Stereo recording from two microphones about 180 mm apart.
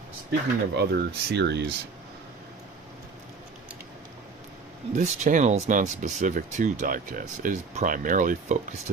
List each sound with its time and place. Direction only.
0.3 s speech: 70° right (ahead or behind)
4.9 s speech: 45° right (ahead or behind)